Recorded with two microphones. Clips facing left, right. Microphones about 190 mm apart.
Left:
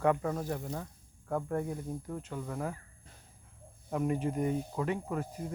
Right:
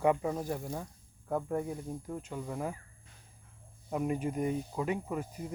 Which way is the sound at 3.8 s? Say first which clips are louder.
Left 1 dB; 15° right (ahead or behind).